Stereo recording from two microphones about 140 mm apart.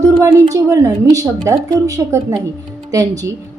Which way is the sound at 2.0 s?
20° right (ahead or behind).